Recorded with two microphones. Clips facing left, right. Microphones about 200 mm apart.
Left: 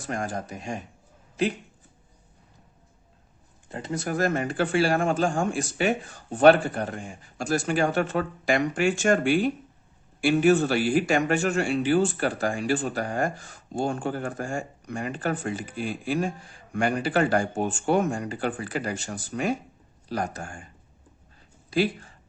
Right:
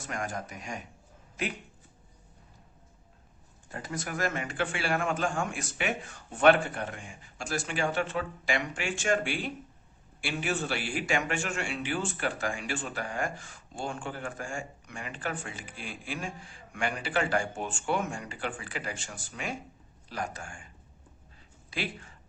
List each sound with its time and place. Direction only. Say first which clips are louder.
0.1 s speech: left 5 dB; 35° left (ahead or behind)
3.7 s speech: left 7 dB; 25° left (ahead or behind); by 20.7 s 40° left (ahead or behind)
21.7 s speech: left 12 dB; 35° left (ahead or behind)